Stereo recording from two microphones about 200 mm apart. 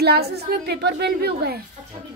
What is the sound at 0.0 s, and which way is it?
A woman's voice, 50° right (ahead or behind).